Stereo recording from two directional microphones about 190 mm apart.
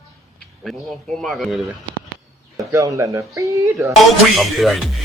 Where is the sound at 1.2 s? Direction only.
Centre (ahead or behind).